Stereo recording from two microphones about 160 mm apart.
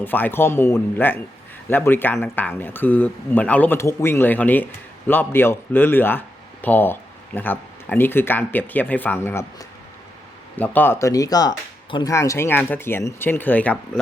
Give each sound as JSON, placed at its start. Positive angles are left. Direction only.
{"t": 0.0, "sound": "speech", "side_deg": 10}